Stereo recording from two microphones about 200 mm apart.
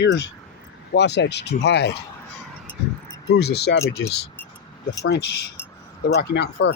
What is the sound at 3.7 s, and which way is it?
Speech, 55° left (ahead or behind).